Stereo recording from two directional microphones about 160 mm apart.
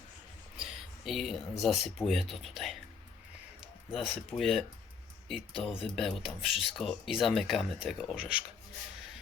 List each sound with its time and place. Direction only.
0.5 s speech: 5° right (ahead or behind)
3.9 s speech: centre (ahead or behind)
5.6 s speech: centre (ahead or behind)